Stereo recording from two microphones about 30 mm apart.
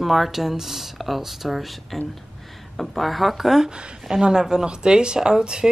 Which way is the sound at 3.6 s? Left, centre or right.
Right.